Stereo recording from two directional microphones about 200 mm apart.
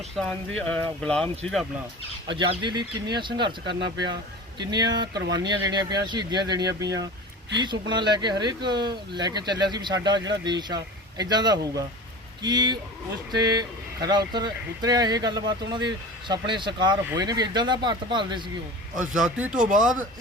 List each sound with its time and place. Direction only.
0.2 s speech: 5° left (ahead or behind)
2.3 s speech: 25° right (ahead or behind)
3.7 s speech: 60° right (ahead or behind)
4.0 s speech: 20° right (ahead or behind)
18.9 s speech: 5° right (ahead or behind)